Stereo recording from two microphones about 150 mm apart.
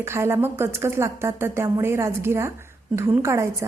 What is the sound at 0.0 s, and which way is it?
A woman's voice, 15° right (ahead or behind).